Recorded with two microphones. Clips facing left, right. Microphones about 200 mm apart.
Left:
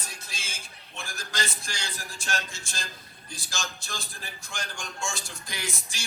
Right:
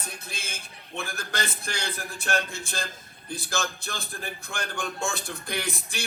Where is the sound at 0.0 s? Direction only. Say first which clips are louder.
Right 4 dB; 60° right (ahead or behind).